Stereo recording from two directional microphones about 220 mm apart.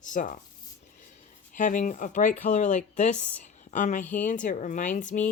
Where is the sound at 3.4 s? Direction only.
35° left (ahead or behind).